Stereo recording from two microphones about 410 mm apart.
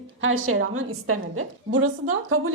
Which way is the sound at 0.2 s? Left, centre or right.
Right.